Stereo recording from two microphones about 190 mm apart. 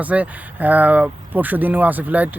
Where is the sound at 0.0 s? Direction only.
10° right (ahead or behind).